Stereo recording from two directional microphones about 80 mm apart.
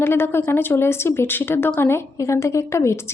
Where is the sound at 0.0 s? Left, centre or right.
Left.